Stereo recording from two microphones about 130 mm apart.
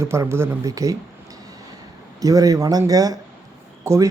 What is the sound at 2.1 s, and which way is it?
Speech, 30° right (ahead or behind).